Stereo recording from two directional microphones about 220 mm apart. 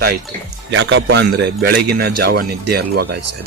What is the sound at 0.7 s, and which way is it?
A man's voice, 55° right (ahead or behind).